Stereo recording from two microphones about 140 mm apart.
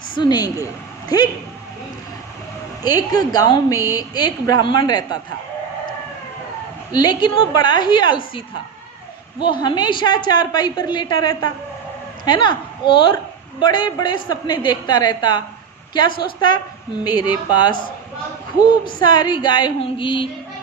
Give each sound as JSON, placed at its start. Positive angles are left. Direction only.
{"t": 0.2, "sound": "a woman's voice", "side_deg": 30}
{"t": 2.8, "sound": "a woman's voice", "side_deg": 25}
{"t": 6.9, "sound": "a woman's voice", "side_deg": 30}